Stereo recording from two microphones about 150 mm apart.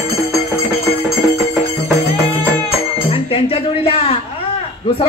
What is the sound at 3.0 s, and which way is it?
Chink, 40° left (ahead or behind).